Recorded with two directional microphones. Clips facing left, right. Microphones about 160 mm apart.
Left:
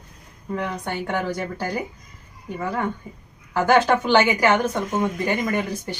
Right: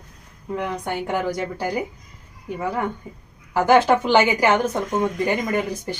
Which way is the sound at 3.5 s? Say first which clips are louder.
Right 2 dB; 15° right (ahead or behind).